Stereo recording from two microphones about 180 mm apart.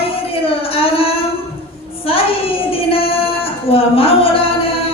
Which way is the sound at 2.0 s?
30° left (ahead or behind).